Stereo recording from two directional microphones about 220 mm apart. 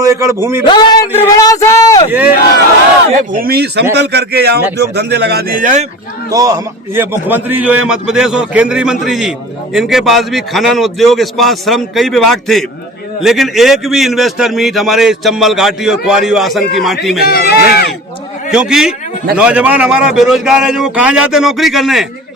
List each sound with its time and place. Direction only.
0.0 s a man's voice: 15° right (ahead or behind)
0.6 s speech: 20° left (ahead or behind)
3.3 s speech: 45° right (ahead or behind)
6.3 s a man's voice: 15° right (ahead or behind); by 17.2 s centre (ahead or behind)
17.2 s a man's voice: 45° left (ahead or behind)
18.5 s a man's voice: 5° right (ahead or behind)